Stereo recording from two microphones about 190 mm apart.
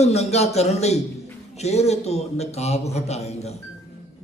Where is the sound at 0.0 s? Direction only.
35° left (ahead or behind).